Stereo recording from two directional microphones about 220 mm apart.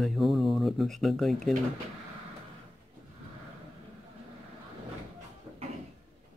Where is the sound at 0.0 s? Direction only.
Centre (ahead or behind).